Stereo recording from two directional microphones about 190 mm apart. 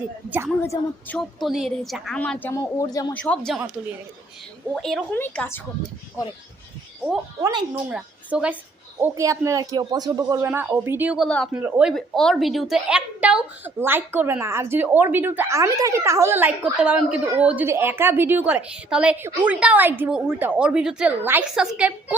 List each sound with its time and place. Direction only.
0.3 s a woman's voice: 10° right (ahead or behind)
0.6 s a woman's voice: 10° left (ahead or behind)
3.2 s a woman's voice: 5° left (ahead or behind)
4.7 s a woman's voice: centre (ahead or behind)
7.4 s a woman's voice: 15° right (ahead or behind)
7.9 s a woman's voice: 5° right (ahead or behind)